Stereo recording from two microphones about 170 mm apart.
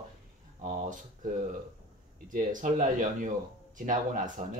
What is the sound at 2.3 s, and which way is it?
Speech, 50° right (ahead or behind).